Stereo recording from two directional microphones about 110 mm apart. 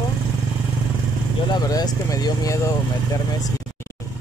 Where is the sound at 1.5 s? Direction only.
35° left (ahead or behind).